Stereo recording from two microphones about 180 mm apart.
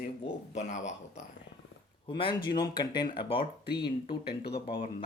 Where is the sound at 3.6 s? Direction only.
65° left (ahead or behind).